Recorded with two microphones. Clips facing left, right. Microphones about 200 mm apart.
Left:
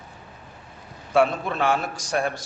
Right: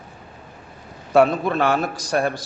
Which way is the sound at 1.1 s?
40° right (ahead or behind).